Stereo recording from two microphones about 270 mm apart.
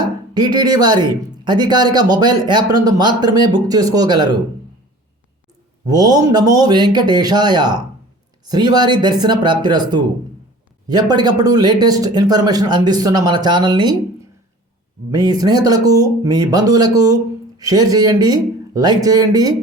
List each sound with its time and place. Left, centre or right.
0.3 s speech: centre
5.8 s speech: centre
15.1 s speech: centre